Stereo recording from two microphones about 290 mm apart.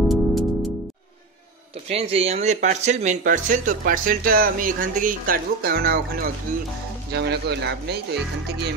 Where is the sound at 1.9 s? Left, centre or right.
Right.